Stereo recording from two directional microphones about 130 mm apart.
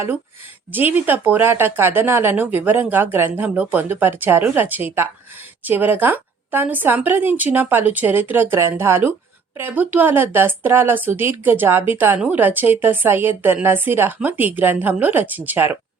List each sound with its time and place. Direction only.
0.7 s speech: 15° right (ahead or behind)